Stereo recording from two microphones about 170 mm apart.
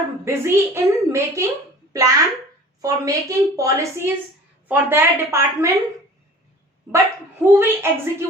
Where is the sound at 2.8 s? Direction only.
20° right (ahead or behind).